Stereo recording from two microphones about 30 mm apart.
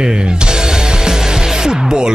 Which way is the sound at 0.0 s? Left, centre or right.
Right.